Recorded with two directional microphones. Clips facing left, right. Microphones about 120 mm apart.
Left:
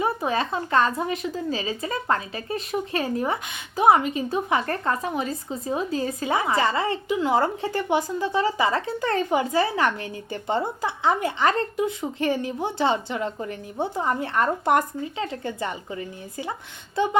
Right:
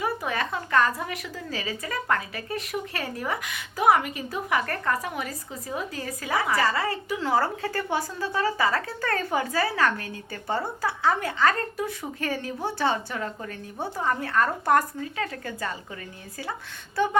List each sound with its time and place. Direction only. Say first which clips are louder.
0.0 s a woman's voice: left 4 dB; 25° left (ahead or behind)